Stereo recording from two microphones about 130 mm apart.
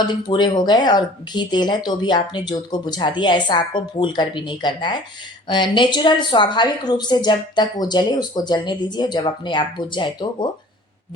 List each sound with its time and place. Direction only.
0.3 s speech: 35° left (ahead or behind)